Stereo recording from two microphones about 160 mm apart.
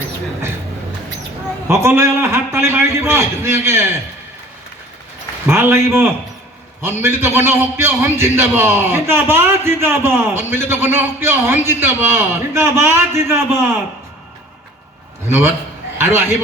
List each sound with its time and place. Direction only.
1.6 s a man's voice: 15° right (ahead or behind)
5.5 s a man's voice: 15° right (ahead or behind)
15.3 s a man's voice: 15° right (ahead or behind)